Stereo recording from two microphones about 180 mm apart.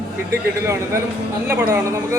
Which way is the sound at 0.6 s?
15° right (ahead or behind).